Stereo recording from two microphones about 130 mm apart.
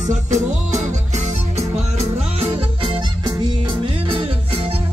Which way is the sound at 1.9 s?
50° right (ahead or behind).